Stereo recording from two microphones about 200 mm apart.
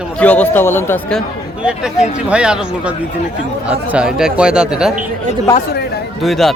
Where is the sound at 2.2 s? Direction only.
5° right (ahead or behind).